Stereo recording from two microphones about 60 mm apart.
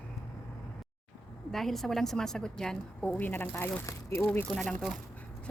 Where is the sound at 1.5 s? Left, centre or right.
Centre.